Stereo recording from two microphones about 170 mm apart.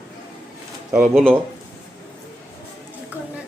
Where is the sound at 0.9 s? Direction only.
5° right (ahead or behind).